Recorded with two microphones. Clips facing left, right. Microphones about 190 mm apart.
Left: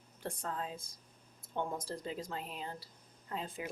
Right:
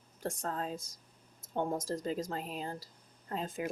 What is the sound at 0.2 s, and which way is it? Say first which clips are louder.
Speech: right 3 dB; 45° right (ahead or behind).